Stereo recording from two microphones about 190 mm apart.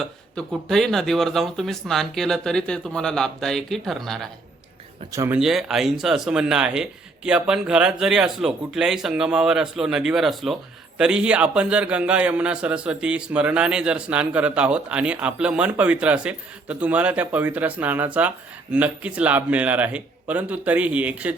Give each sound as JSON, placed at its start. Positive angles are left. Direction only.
{"t": 0.0, "sound": "speech", "side_deg": 0}
{"t": 5.1, "sound": "speech", "side_deg": -15}
{"t": 5.4, "sound": "speech", "side_deg": 0}